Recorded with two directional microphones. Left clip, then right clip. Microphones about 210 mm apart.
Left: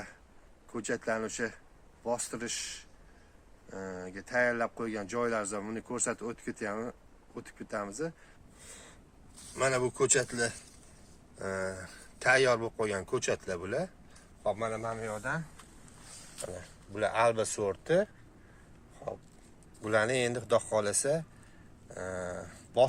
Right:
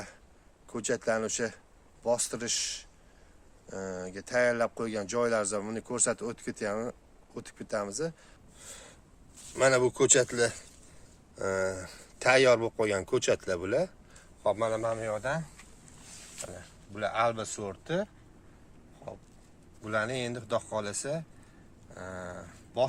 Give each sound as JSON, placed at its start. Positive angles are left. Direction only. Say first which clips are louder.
{"t": 0.7, "sound": "speech", "louder": "right 3 dB", "side_deg": -50}
{"t": 9.6, "sound": "speech", "louder": "right 5 dB", "side_deg": -40}
{"t": 16.6, "sound": "speech", "louder": "left 2 dB", "side_deg": 35}
{"t": 19.8, "sound": "speech", "louder": "left 3 dB", "side_deg": 45}
{"t": 21.8, "sound": "a sound", "louder": "left 3 dB", "side_deg": 35}